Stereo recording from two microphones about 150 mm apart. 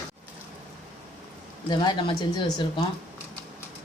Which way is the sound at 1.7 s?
30° left (ahead or behind).